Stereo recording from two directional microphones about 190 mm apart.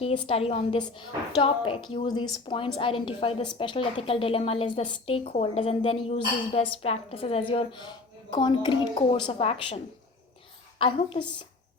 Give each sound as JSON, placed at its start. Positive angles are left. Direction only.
{"t": 0.3, "sound": "a woman's voice", "side_deg": 30}